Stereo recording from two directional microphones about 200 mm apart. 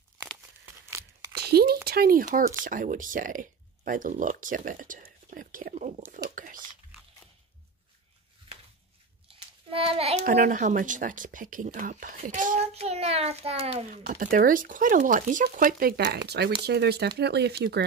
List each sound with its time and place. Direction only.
0.8 s crunch: 15° right (ahead or behind)
1.3 s a sound: 50° right (ahead or behind)
1.9 s speech: 45° right (ahead or behind)
6.3 s typing: 40° right (ahead or behind)
9.7 s a child's voice: 30° right (ahead or behind)
10.2 s a child's voice: 40° right (ahead or behind)